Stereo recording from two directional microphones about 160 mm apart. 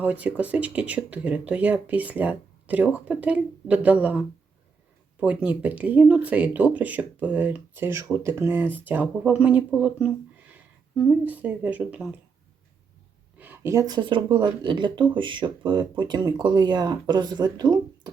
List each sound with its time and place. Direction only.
0.0 s speech: 10° right (ahead or behind)
5.2 s speech: 10° right (ahead or behind)
13.4 s speech: 15° right (ahead or behind)